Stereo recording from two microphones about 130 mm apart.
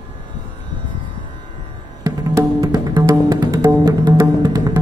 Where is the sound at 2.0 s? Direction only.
25° right (ahead or behind).